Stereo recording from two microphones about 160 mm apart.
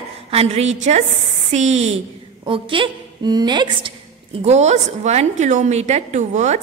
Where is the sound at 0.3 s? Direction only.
40° right (ahead or behind).